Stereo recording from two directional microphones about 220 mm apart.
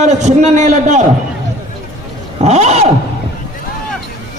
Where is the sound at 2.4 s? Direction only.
30° right (ahead or behind).